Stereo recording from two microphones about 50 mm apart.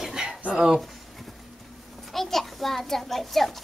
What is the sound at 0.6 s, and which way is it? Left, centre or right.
Speech, centre.